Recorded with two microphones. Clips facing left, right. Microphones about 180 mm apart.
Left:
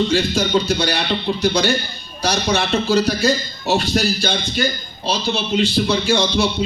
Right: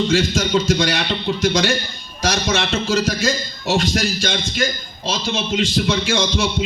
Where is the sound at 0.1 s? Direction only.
90° right.